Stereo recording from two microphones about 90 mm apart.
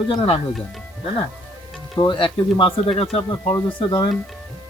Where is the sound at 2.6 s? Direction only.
90° left.